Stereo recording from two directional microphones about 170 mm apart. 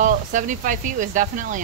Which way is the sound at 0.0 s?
50° right (ahead or behind).